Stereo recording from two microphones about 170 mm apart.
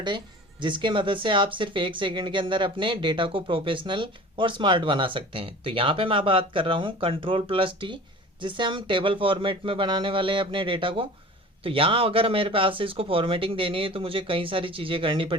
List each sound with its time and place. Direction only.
0.6 s speech: 30° right (ahead or behind)